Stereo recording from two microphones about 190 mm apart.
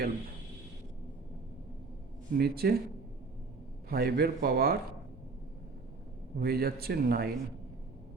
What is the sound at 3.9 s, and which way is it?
Speech, 55° right (ahead or behind).